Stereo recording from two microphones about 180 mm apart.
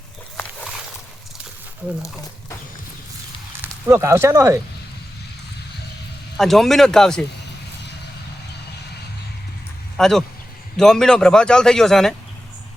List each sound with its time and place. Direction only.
3.6 s speech: 15° right (ahead or behind)
6.3 s a man's voice: centre (ahead or behind)
10.0 s a man's voice: centre (ahead or behind)